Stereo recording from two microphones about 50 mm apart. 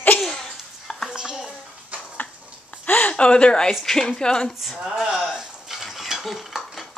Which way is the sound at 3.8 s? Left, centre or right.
Centre.